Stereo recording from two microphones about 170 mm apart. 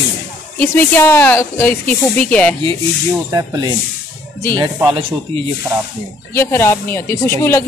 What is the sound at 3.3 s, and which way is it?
Speech, 20° right (ahead or behind).